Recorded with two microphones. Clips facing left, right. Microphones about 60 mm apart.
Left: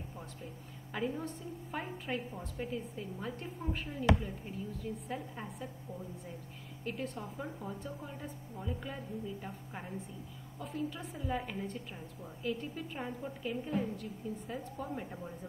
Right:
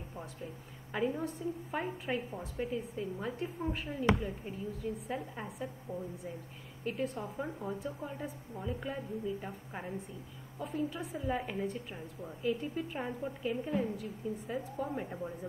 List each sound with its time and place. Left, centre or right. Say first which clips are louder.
0.9 s a woman's voice: right 3 dB; centre
6.8 s a woman's voice: right 4 dB; centre